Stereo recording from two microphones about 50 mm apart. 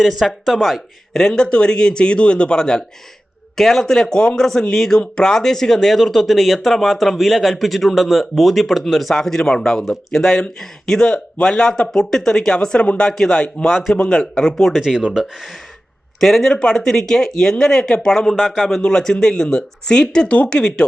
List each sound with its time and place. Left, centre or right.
0.0 s speech: centre
1.1 s speech: centre
11.9 s speech: centre
13.7 s speech: centre
13.9 s speech: centre
14.5 s speech: centre
14.8 s speech: centre
16.2 s speech: centre
18.3 s speech: centre
18.8 s speech: centre